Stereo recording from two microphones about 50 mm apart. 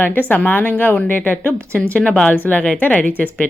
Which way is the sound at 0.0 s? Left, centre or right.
Left.